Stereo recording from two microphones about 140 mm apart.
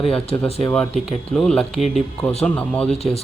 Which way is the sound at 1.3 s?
5° left (ahead or behind).